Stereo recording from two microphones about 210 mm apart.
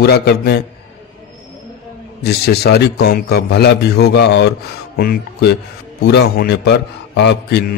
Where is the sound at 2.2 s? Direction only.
50° left (ahead or behind).